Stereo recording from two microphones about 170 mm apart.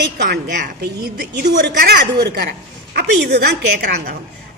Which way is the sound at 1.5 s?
90° right.